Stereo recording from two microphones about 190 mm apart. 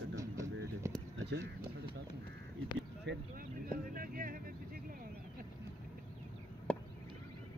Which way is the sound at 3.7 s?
50° right (ahead or behind).